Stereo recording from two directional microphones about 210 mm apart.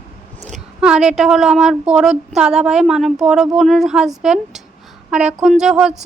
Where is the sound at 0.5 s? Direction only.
5° right (ahead or behind).